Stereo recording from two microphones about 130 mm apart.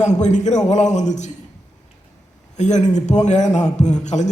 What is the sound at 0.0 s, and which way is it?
A man's voice, 65° left (ahead or behind).